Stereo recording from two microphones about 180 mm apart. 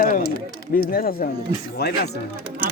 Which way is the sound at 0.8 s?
55° left (ahead or behind).